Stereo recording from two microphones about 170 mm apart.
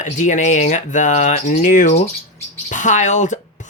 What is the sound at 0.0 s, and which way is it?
Speech, 45° left (ahead or behind).